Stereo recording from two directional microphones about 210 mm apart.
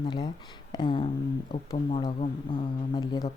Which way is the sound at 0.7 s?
25° left (ahead or behind).